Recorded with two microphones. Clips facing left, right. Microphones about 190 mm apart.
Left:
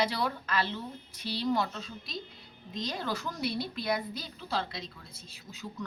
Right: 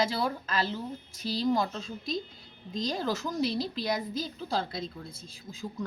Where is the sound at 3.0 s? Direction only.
25° right (ahead or behind).